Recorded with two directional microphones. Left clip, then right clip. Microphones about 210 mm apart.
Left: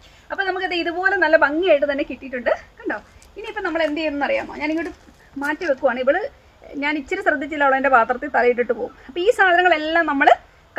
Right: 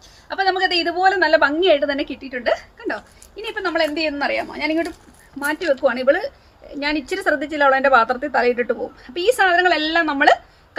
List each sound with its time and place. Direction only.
0.3 s a woman's voice: 10° left (ahead or behind)